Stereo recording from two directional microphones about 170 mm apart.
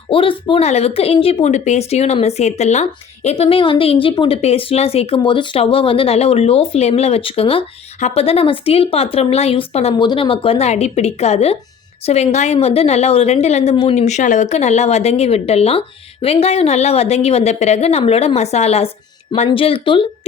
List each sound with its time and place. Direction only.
0.1 s speech: 30° left (ahead or behind)